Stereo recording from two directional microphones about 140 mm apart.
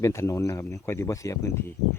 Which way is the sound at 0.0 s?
20° left (ahead or behind).